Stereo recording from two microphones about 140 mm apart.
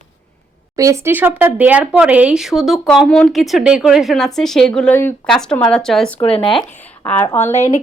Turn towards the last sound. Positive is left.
turn(degrees=50)  # may be behind; listen again after turning